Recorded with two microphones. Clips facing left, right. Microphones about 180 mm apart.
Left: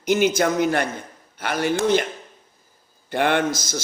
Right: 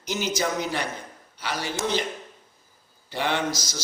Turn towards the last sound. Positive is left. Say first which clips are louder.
# left 5 dB
turn(degrees=50)  # may be behind; listen again after turning